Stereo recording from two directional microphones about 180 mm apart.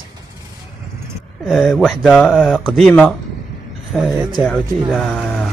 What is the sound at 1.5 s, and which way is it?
Speech, centre (ahead or behind).